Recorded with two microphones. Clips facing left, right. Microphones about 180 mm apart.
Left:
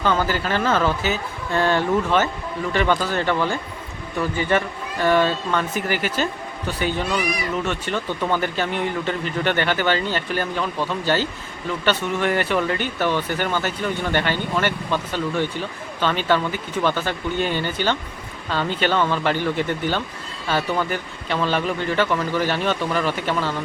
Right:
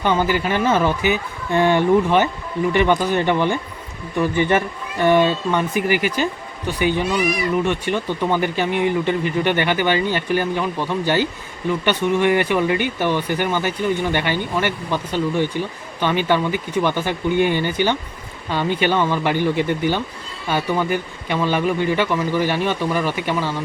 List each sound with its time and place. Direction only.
0.0 s speech: 15° right (ahead or behind)